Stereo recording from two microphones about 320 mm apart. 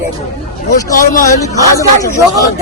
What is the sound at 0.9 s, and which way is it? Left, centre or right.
Speech, left.